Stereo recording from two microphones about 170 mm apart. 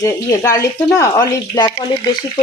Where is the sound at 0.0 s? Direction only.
20° left (ahead or behind).